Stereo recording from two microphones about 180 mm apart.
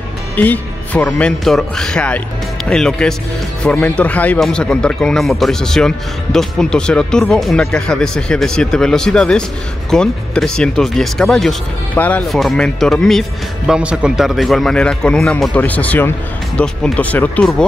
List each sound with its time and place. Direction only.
0.4 s speech: 10° left (ahead or behind)